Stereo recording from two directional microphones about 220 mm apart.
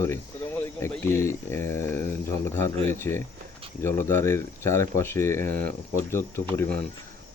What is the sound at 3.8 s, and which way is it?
Speech, 10° left (ahead or behind).